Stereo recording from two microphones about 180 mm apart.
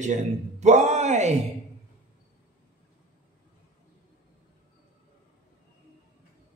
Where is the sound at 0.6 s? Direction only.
40° right (ahead or behind).